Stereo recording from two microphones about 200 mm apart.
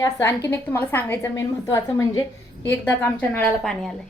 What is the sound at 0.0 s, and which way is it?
A woman's voice, 15° left (ahead or behind).